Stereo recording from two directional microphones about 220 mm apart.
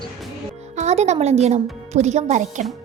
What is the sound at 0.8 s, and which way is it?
A woman's voice, 30° right (ahead or behind).